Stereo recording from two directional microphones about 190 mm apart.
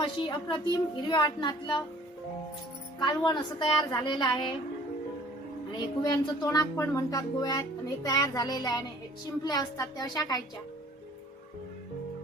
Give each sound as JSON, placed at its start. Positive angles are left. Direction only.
{"t": 0.0, "sound": "speech", "side_deg": 25}
{"t": 3.0, "sound": "speech", "side_deg": 25}
{"t": 5.7, "sound": "speech", "side_deg": 20}